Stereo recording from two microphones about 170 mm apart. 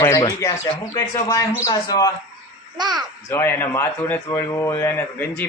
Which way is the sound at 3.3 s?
15° left (ahead or behind).